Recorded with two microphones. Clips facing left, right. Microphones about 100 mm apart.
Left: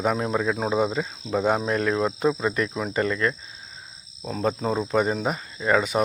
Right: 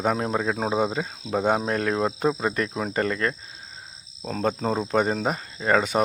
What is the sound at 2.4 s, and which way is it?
Cricket, 45° right (ahead or behind).